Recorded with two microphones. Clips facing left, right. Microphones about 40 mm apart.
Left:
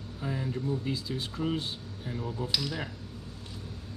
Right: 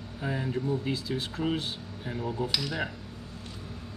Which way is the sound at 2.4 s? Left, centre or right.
Centre.